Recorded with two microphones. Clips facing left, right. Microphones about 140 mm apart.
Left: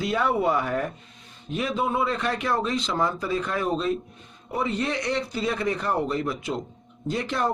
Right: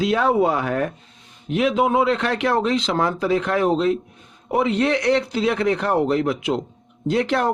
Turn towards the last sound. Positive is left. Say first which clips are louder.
# right 6 dB
turn(degrees=-75)  # may be behind; listen again after turning